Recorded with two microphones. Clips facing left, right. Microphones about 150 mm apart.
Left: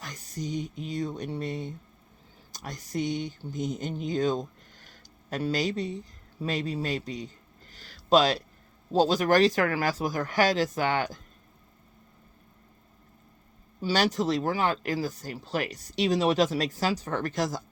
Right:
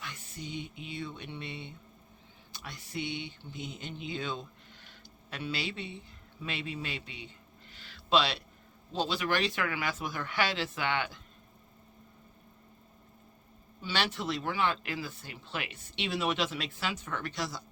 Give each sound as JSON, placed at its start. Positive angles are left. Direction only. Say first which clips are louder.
{"t": 0.0, "sound": "speech", "louder": "left 7 dB", "side_deg": 40}
{"t": 13.8, "sound": "speech", "louder": "left 8 dB", "side_deg": 40}